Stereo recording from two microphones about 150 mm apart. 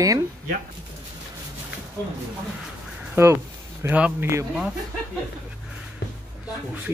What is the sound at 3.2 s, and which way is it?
Speech, 15° right (ahead or behind).